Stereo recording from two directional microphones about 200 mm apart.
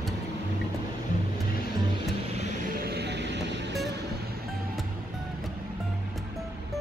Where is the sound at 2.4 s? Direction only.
45° right (ahead or behind); by 3.8 s 60° right (ahead or behind).